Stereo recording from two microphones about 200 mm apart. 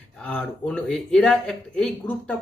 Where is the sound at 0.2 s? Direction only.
5° left (ahead or behind).